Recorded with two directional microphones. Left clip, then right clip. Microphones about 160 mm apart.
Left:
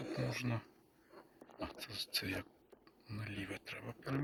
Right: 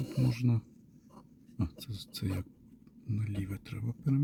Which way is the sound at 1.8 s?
30° right (ahead or behind).